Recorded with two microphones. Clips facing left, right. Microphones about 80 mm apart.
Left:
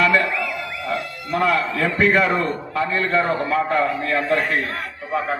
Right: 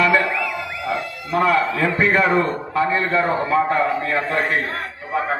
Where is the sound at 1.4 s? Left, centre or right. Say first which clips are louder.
Right 2 dB; right.